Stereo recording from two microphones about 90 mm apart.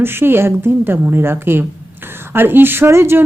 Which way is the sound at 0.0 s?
25° right (ahead or behind).